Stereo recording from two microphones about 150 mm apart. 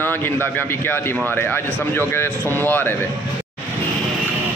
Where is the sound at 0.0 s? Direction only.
15° left (ahead or behind).